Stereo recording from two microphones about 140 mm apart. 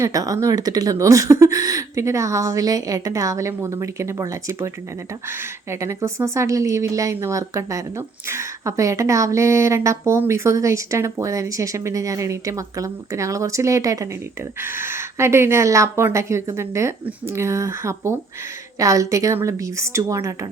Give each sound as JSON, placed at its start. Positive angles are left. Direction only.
{"t": 0.0, "sound": "a woman's voice", "side_deg": -25}